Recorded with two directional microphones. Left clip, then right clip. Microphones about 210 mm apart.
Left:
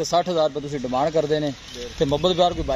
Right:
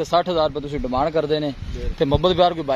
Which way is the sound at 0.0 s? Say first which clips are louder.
Right 1 dB; 5° right (ahead or behind).